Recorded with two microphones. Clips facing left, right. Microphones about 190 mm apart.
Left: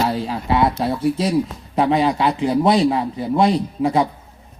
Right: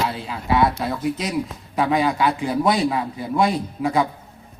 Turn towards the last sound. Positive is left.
turn(degrees=25)  # may be behind; listen again after turning